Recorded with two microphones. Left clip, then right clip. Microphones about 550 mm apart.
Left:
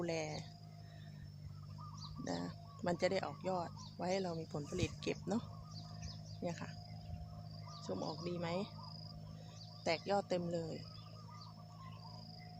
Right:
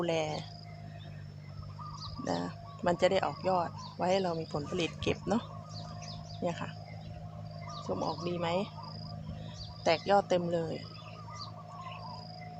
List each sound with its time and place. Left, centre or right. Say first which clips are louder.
0.0 s speech: right 9 dB; right
2.0 s speech: right 9 dB; right
6.1 s a sound: right 9 dB; right
7.7 s a sound: right 8 dB; right
7.9 s speech: right 9 dB; right
9.8 s speech: right 10 dB; right